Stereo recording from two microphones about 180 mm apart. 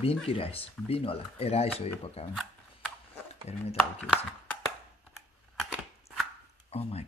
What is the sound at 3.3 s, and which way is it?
Speech, 35° left (ahead or behind).